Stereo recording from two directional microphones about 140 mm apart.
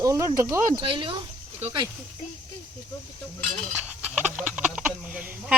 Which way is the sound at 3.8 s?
10° right (ahead or behind).